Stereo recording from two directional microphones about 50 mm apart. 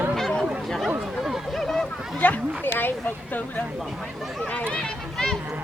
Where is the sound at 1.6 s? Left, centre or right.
Centre.